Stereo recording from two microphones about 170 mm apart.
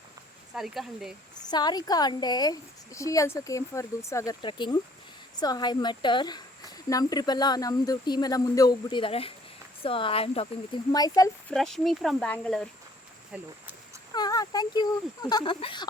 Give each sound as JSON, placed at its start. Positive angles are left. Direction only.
{"t": 0.5, "sound": "speech", "side_deg": 0}
{"t": 1.5, "sound": "a woman's voice", "side_deg": 25}
{"t": 4.4, "sound": "a woman's voice", "side_deg": 25}
{"t": 10.9, "sound": "a woman's voice", "side_deg": 20}
{"t": 11.4, "sound": "speech", "side_deg": 0}
{"t": 13.3, "sound": "speech", "side_deg": -5}
{"t": 14.1, "sound": "a woman's voice", "side_deg": 25}